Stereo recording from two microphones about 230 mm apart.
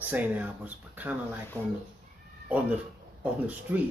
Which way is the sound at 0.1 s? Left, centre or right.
Centre.